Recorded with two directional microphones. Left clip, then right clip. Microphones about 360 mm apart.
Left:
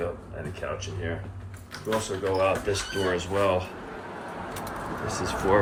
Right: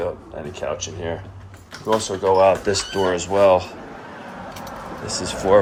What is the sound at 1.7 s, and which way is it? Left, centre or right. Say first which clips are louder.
Speech: right 7 dB; centre.